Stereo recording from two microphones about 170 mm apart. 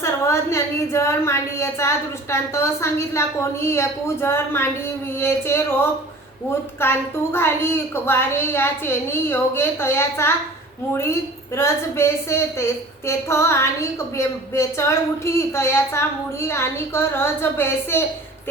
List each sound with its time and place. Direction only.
0.0 s a woman's voice: 15° left (ahead or behind)